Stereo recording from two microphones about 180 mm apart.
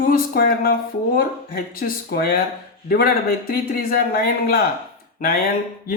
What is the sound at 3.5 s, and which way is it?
Speech, 55° left (ahead or behind).